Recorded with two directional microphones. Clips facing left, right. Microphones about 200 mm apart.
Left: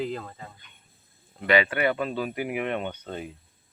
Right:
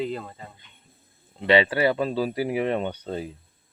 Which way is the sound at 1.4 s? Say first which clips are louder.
Right 3 dB; 30° right (ahead or behind).